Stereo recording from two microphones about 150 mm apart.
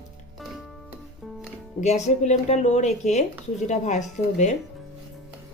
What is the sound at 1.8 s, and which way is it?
A woman's voice, 50° left (ahead or behind).